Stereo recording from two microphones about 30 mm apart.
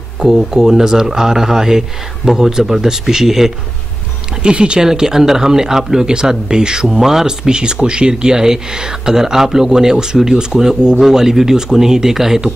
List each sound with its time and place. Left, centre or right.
0.2 s speech: centre
4.4 s speech: right
4.8 s speech: centre
7.0 s speech: centre
7.4 s speech: right
8.1 s speech: right
11.0 s speech: centre